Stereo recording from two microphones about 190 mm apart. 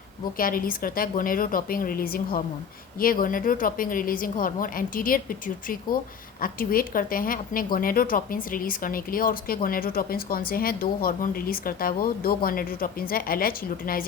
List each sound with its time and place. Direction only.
0.3 s a woman's voice: 50° left (ahead or behind)